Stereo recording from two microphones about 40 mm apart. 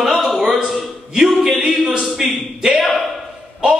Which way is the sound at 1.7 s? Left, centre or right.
Centre.